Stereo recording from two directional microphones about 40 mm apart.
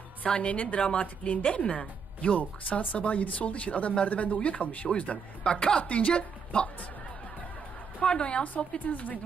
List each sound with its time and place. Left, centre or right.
0.3 s a woman's voice: left
0.5 s speech: left
0.8 s a woman's voice: left
5.5 s a woman's voice: left
8.2 s speech: left
8.9 s speech: left